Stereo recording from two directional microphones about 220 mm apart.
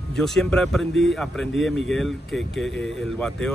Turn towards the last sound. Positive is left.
turn(degrees=5)  # may be behind; listen again after turning